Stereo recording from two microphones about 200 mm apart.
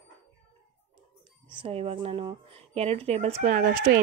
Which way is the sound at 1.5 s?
25° right (ahead or behind).